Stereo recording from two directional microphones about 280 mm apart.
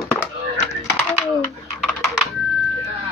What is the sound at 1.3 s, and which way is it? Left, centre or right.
Typing, centre.